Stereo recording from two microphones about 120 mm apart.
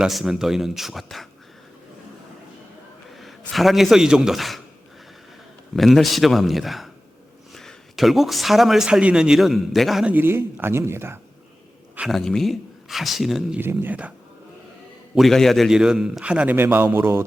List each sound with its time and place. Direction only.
0.0 s speech: 5° right (ahead or behind)
3.2 s a man's voice: centre (ahead or behind)
5.7 s speech: centre (ahead or behind)
10.1 s speech: 20° right (ahead or behind)
11.9 s speech: centre (ahead or behind)
13.6 s a man's voice: 15° right (ahead or behind)
15.1 s a man's voice: centre (ahead or behind); by 17.2 s 20° right (ahead or behind)